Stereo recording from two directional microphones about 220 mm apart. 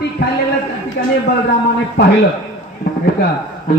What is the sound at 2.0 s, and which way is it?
Speech, 50° left (ahead or behind).